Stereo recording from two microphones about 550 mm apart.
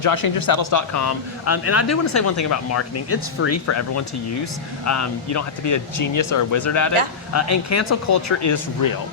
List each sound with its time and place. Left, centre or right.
0.0 s speech: left